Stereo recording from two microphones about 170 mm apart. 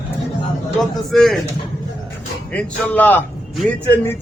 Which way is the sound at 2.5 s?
10° left (ahead or behind).